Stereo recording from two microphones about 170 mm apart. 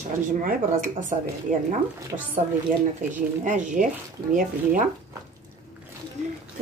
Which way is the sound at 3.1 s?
50° right (ahead or behind).